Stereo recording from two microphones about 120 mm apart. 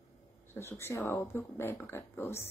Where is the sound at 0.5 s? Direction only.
20° left (ahead or behind).